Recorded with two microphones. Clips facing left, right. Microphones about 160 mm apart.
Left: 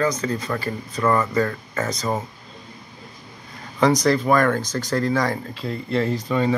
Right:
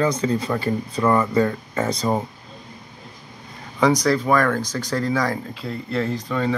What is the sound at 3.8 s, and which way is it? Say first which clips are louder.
Speech: even; 10° right (ahead or behind).